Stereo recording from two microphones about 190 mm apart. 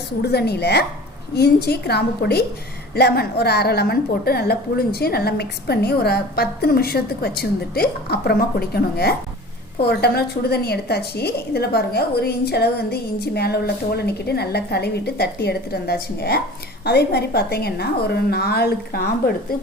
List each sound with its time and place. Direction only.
0.2 s a woman's voice: 60° left (ahead or behind)